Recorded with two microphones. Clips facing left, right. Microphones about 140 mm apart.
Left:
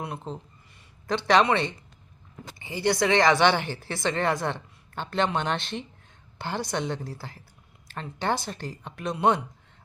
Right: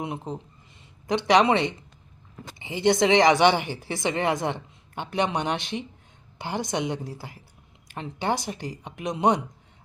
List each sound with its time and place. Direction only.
0.0 s a woman's voice: 15° right (ahead or behind)